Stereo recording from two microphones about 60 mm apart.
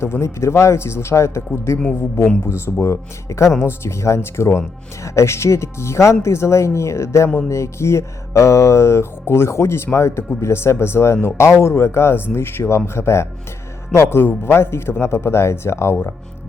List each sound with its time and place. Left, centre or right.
0.0 s speech: left
2.5 s speech: left